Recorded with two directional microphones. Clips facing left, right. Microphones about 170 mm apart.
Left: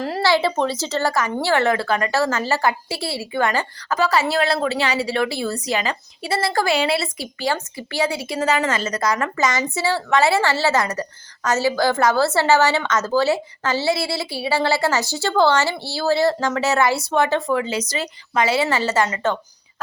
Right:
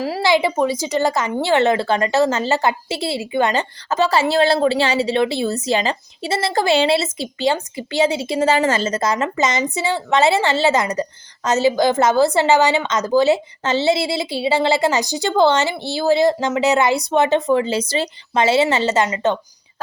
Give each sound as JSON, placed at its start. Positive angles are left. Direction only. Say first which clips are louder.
{"t": 0.2, "sound": "a woman's voice", "louder": "right 2 dB", "side_deg": -15}